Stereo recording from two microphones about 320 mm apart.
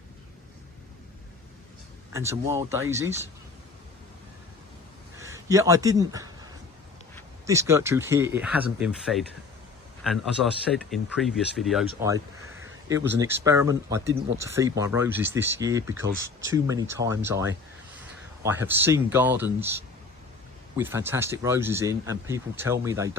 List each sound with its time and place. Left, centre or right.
2.1 s speech: centre
5.2 s a man's voice: centre
7.4 s speech: centre
16.0 s speech: right
16.5 s speech: centre
20.7 s speech: centre